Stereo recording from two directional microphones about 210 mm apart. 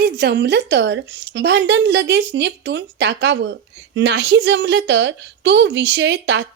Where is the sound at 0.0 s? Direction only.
50° right (ahead or behind).